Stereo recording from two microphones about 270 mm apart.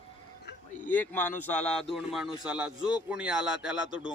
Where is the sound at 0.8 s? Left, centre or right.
Centre.